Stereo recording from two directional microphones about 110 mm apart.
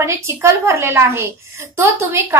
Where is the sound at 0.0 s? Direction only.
25° right (ahead or behind).